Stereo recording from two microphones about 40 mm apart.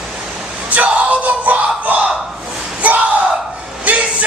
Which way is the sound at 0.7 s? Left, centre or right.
Right.